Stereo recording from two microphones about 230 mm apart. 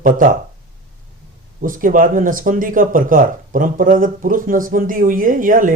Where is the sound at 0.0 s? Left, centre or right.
Right.